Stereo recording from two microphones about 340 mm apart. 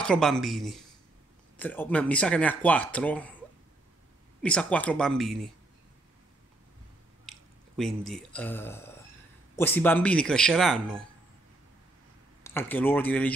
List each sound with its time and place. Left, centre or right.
0.0 s speech: centre
4.4 s speech: centre
7.2 s speech: centre
12.4 s speech: centre